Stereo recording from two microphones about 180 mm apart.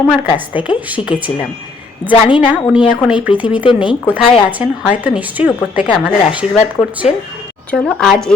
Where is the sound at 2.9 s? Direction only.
5° right (ahead or behind).